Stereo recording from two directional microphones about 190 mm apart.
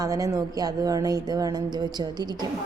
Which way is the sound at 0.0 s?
20° right (ahead or behind).